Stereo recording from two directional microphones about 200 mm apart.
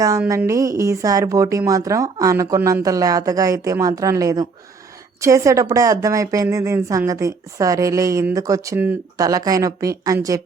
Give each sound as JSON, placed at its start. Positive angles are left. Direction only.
{"t": 0.3, "sound": "a woman's voice", "side_deg": -15}